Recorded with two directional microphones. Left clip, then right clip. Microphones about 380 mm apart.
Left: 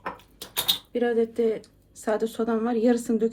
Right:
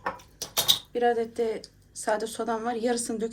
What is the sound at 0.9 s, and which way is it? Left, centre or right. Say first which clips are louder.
Speech: left 1 dB; centre.